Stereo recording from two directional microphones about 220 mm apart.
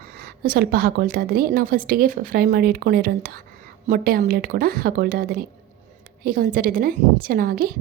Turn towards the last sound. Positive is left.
turn(degrees=-40)  # may be behind; listen again after turning